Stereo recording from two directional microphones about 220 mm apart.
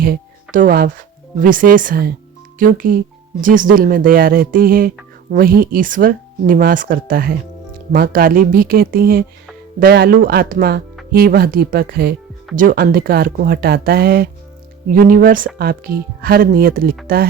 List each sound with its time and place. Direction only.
0.0 s a woman's voice: 40° right (ahead or behind)